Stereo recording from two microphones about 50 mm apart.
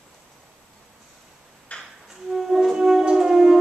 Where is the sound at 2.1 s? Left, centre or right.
Centre.